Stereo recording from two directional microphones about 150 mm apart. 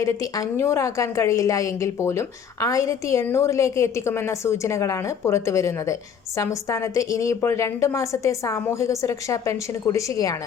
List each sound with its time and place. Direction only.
0.0 s a woman's voice: 20° left (ahead or behind)